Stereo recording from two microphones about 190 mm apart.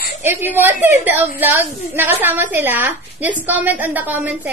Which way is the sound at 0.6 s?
10° right (ahead or behind).